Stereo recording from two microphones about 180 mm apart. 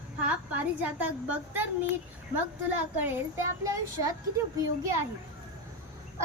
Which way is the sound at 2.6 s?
10° right (ahead or behind).